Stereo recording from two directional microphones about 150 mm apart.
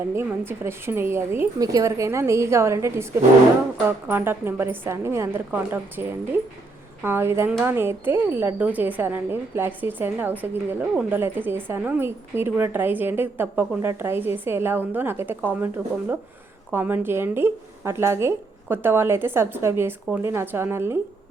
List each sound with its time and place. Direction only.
0.1 s speech: 15° right (ahead or behind)